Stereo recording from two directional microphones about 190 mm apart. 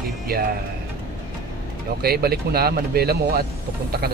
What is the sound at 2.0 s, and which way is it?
Speech, 55° right (ahead or behind).